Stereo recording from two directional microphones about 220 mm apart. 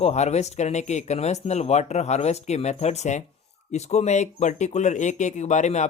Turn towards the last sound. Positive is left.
turn(degrees=30)  # may be behind; listen again after turning